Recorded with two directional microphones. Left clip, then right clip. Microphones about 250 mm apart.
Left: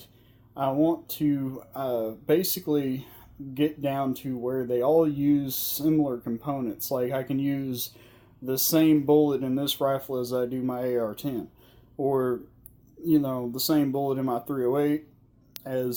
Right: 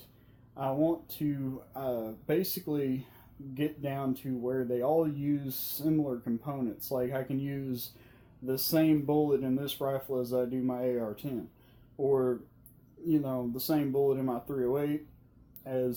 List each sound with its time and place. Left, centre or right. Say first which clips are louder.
0.5 s speech: left 5 dB; left